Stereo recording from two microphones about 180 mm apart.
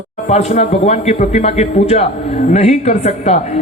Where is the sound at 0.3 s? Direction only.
35° left (ahead or behind).